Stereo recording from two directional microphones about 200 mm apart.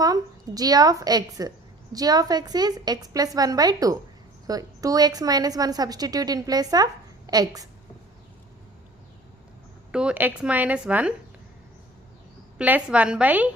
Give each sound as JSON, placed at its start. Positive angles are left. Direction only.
{"t": 0.0, "sound": "a woman's voice", "side_deg": -20}
{"t": 9.9, "sound": "a woman's voice", "side_deg": -5}
{"t": 12.5, "sound": "a woman's voice", "side_deg": -5}